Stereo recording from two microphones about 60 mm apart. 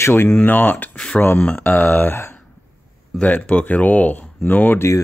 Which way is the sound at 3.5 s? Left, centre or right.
Left.